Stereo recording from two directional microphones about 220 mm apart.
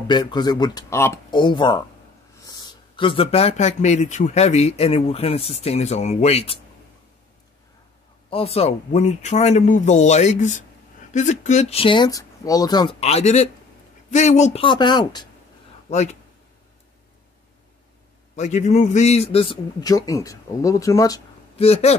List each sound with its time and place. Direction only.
0.1 s speech: 20° left (ahead or behind)
3.0 s speech: 25° left (ahead or behind)
8.3 s speech: 25° left (ahead or behind)
15.9 s speech: 30° left (ahead or behind)
18.3 s speech: 30° left (ahead or behind); by 21.2 s 15° left (ahead or behind)
21.5 s speech: 30° left (ahead or behind)